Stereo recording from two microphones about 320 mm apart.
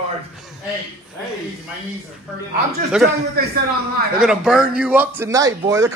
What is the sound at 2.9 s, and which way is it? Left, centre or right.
Speech, centre.